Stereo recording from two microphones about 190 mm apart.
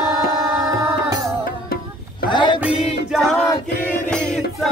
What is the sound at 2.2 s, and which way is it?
Music, 25° left (ahead or behind).